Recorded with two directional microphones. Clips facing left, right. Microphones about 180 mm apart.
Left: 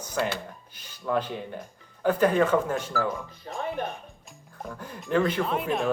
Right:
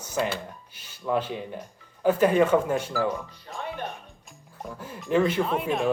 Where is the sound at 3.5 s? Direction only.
35° left (ahead or behind).